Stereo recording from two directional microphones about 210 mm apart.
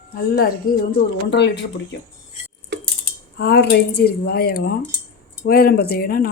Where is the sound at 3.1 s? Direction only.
50° left (ahead or behind).